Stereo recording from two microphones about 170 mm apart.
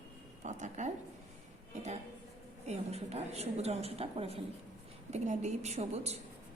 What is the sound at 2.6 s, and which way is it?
A woman's voice, 40° right (ahead or behind).